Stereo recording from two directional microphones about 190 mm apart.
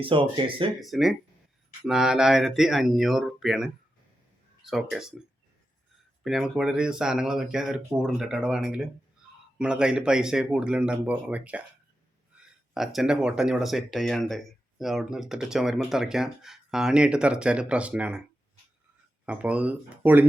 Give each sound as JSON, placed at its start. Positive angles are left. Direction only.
{"t": 0.0, "sound": "speech", "side_deg": -25}
{"t": 0.8, "sound": "speech", "side_deg": 0}
{"t": 6.2, "sound": "speech", "side_deg": 0}
{"t": 12.7, "sound": "speech", "side_deg": 0}
{"t": 19.2, "sound": "speech", "side_deg": -5}